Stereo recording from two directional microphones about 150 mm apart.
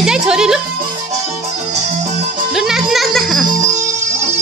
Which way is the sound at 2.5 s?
5° right (ahead or behind).